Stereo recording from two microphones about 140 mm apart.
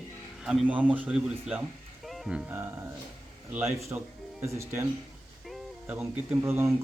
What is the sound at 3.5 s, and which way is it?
Speech, 20° right (ahead or behind).